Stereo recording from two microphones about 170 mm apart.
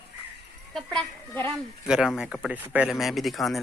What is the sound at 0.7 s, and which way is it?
Children playing, 5° left (ahead or behind).